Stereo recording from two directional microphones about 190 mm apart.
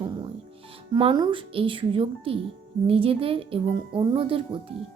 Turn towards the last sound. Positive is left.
turn(degrees=-30)  # may be behind; listen again after turning